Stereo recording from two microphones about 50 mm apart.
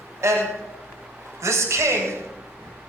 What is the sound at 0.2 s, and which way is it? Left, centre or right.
Speech, right.